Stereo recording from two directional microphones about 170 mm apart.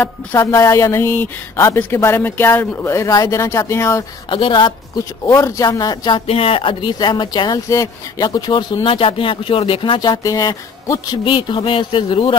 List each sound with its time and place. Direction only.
0.0 s speech: 15° left (ahead or behind)
4.3 s speech: 30° left (ahead or behind)
5.2 s speech: 20° left (ahead or behind)
6.2 s speech: 35° left (ahead or behind)